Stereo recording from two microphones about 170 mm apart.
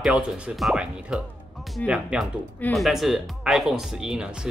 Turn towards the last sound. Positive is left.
turn(degrees=-5)  # may be behind; listen again after turning